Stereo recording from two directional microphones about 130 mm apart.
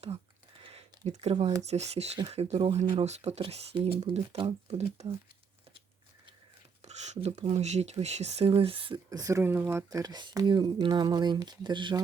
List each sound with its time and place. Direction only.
0.6 s a sound: 50° right (ahead or behind)
1.6 s speech: 55° right (ahead or behind)
6.8 s speech: 60° right (ahead or behind); by 9.0 s 45° right (ahead or behind)
9.0 s speech: 25° right (ahead or behind)